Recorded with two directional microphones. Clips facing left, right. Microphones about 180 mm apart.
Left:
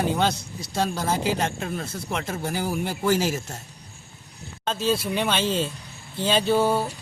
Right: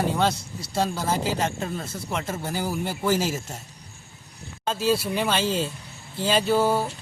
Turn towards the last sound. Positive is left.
turn(degrees=0)  # may be behind; listen again after turning